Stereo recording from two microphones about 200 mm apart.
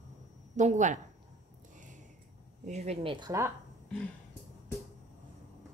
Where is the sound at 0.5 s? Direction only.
35° right (ahead or behind).